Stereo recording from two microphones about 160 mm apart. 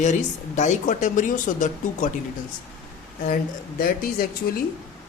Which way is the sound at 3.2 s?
60° left (ahead or behind).